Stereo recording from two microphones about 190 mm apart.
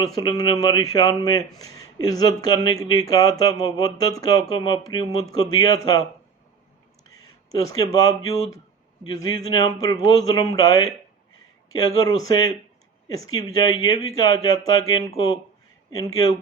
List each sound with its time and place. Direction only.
0.2 s speech: 20° left (ahead or behind)
7.1 s speech: 20° left (ahead or behind)